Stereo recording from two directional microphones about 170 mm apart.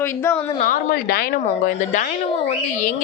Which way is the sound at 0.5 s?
50° left (ahead or behind).